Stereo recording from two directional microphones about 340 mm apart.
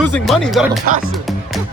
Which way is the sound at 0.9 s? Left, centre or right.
Right.